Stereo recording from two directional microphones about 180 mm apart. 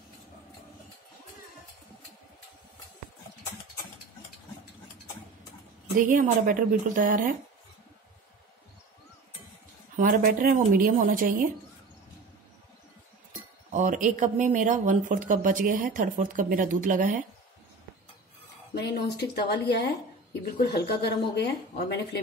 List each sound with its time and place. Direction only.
5.9 s speech: 45° right (ahead or behind)
9.9 s speech: 50° right (ahead or behind)
13.7 s speech: 45° right (ahead or behind)
18.8 s a woman's voice: 65° left (ahead or behind)